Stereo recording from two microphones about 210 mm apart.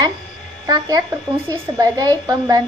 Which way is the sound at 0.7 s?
20° right (ahead or behind).